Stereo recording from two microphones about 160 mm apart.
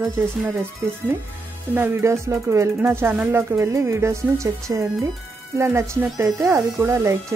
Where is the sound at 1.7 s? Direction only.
15° right (ahead or behind).